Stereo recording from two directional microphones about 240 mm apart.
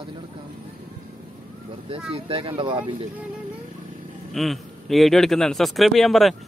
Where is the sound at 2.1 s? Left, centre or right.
Right.